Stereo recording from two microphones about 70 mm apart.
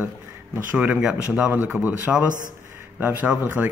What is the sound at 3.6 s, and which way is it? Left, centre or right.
Speech, right.